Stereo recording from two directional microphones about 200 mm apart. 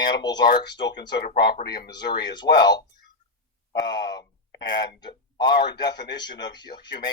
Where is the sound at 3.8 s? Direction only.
20° left (ahead or behind).